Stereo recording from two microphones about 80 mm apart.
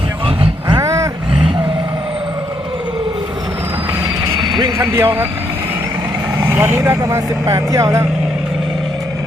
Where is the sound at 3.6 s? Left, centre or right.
Right.